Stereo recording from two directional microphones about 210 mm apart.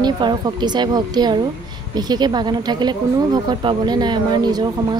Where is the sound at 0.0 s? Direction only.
20° right (ahead or behind).